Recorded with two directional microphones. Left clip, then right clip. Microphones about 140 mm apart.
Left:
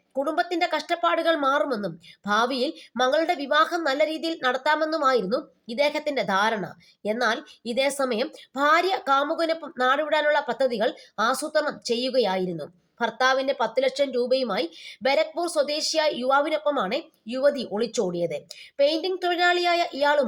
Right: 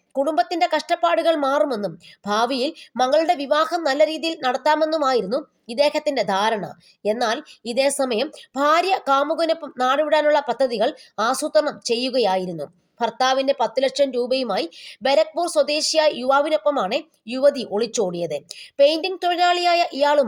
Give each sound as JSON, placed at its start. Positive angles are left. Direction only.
{"t": 0.1, "sound": "a woman's voice", "side_deg": -35}